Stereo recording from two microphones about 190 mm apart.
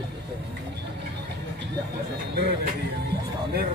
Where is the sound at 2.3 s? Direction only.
60° right (ahead or behind).